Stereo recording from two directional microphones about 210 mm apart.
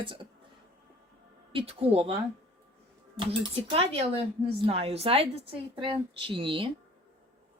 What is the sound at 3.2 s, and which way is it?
Speech, 25° right (ahead or behind).